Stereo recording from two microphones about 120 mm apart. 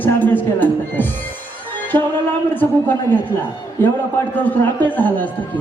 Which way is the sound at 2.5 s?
15° left (ahead or behind).